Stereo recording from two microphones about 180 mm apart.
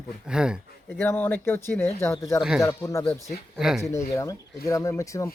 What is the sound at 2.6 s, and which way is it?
Speech, 15° left (ahead or behind).